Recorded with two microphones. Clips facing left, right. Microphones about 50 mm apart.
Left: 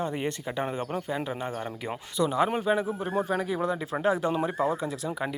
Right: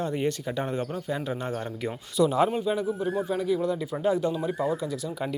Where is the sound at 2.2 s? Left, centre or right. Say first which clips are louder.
Right 3 dB; centre.